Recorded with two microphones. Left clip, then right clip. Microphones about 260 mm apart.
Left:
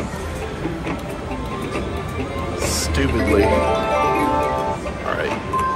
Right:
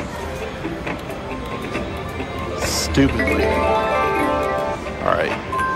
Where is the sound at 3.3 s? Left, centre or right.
Centre.